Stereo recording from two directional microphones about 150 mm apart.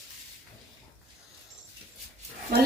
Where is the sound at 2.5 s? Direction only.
90° right.